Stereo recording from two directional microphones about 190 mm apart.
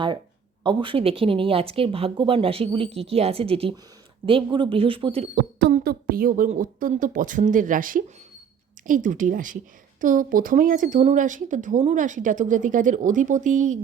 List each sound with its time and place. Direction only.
0.6 s speech: 25° right (ahead or behind)
5.3 s speech: 55° right (ahead or behind)